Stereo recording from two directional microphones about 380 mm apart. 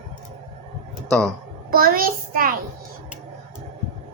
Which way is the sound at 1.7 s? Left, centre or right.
Right.